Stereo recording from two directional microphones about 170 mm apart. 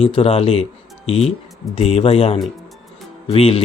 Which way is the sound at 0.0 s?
30° left (ahead or behind).